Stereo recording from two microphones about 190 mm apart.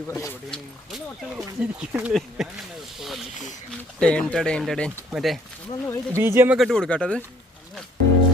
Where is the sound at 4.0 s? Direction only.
5° left (ahead or behind).